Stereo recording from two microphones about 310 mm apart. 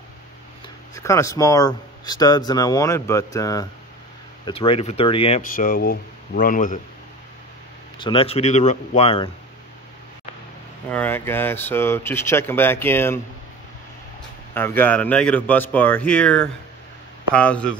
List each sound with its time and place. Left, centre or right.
0.9 s speech: centre; by 6.8 s left
8.0 s speech: centre
10.9 s speech: centre
14.5 s a man's voice: centre